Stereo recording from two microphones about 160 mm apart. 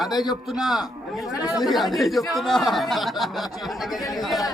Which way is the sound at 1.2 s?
20° left (ahead or behind).